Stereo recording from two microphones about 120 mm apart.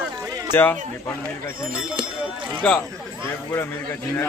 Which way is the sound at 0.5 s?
15° left (ahead or behind).